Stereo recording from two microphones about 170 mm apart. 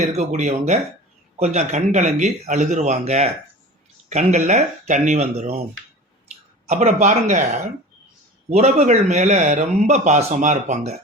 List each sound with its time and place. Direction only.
0.0 s a man's voice: 45° right (ahead or behind)
6.7 s a man's voice: 40° right (ahead or behind)
8.4 s a man's voice: 40° right (ahead or behind)